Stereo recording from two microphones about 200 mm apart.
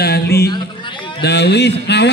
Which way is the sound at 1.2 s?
55° left (ahead or behind).